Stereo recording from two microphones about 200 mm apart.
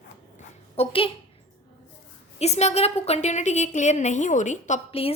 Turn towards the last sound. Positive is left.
turn(degrees=30)  # may be behind; listen again after turning